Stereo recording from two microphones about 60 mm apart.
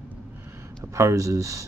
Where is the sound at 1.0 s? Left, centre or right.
Right.